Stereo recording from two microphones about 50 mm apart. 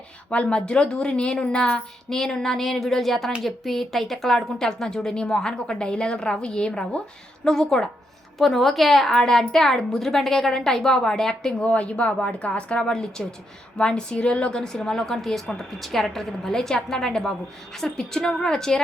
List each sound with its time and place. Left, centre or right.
0.3 s a woman's voice: left
11.6 s speech: left